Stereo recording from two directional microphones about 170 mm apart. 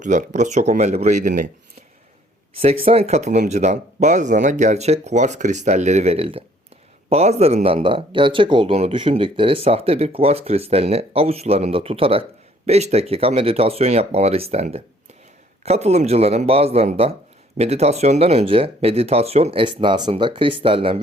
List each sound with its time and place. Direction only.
0.0 s speech: 45° right (ahead or behind)
2.8 s speech: 35° right (ahead or behind)